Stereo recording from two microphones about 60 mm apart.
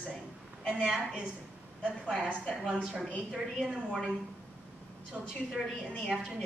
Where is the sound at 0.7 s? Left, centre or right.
Centre.